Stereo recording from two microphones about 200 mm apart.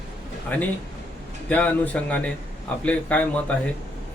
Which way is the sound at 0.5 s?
10° left (ahead or behind).